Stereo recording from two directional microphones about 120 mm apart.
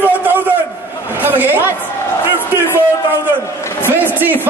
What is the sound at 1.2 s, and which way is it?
Speech, 15° right (ahead or behind).